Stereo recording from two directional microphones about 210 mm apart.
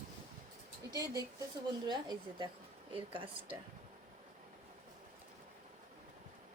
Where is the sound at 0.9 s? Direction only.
15° right (ahead or behind).